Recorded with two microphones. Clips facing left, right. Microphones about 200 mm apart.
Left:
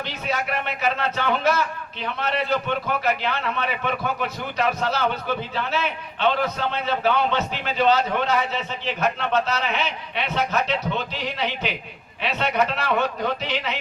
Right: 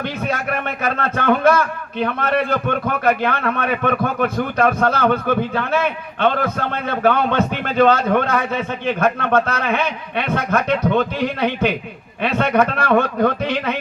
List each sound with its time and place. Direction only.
0.0 s a man's voice: 50° right (ahead or behind)